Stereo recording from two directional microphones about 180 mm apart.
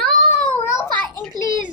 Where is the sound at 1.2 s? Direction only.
25° right (ahead or behind).